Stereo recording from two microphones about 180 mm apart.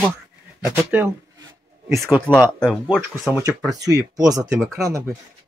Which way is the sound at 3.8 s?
60° right (ahead or behind).